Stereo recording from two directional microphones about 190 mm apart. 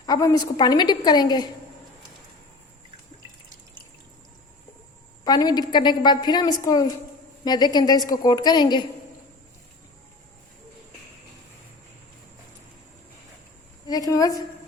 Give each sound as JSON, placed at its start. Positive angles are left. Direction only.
{"t": 0.0, "sound": "a woman's voice", "side_deg": 20}
{"t": 5.2, "sound": "a woman's voice", "side_deg": 20}
{"t": 13.8, "sound": "a woman's voice", "side_deg": 20}